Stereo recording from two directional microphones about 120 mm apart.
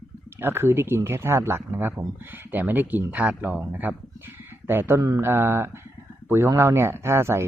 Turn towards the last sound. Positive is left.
turn(degrees=-20)  # may be behind; listen again after turning